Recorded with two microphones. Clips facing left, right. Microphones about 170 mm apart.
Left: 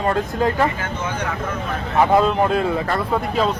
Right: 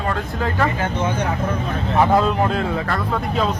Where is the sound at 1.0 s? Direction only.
30° right (ahead or behind).